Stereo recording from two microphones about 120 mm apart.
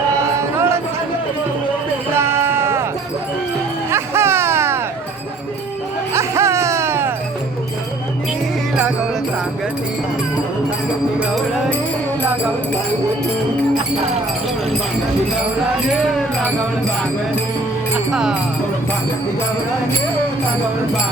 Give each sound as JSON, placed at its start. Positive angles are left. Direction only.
{"t": 0.2, "sound": "music", "side_deg": -25}
{"t": 2.1, "sound": "sheep", "side_deg": -20}
{"t": 3.9, "sound": "a sound", "side_deg": -20}
{"t": 6.1, "sound": "music", "side_deg": -25}
{"t": 18.1, "sound": "speech", "side_deg": -5}